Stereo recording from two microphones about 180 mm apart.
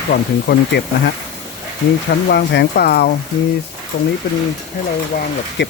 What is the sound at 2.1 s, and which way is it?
Speech, 65° left (ahead or behind).